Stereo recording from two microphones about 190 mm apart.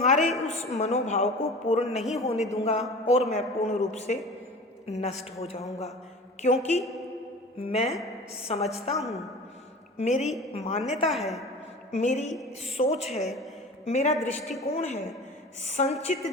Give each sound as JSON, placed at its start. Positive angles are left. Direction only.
{"t": 0.0, "sound": "a sound", "side_deg": 35}
{"t": 0.4, "sound": "a woman's voice", "side_deg": 35}
{"t": 2.0, "sound": "a woman's voice", "side_deg": 0}
{"t": 2.5, "sound": "a woman's voice", "side_deg": 35}
{"t": 9.0, "sound": "a woman's voice", "side_deg": 0}
{"t": 10.0, "sound": "a woman's voice", "side_deg": 35}
{"t": 11.1, "sound": "a woman's voice", "side_deg": 0}
{"t": 11.9, "sound": "a woman's voice", "side_deg": 40}